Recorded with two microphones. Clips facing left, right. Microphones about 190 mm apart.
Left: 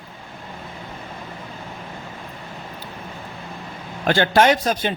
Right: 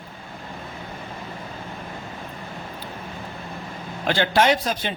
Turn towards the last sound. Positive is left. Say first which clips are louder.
# left 3 dB
turn(degrees=50)  # may be behind; listen again after turning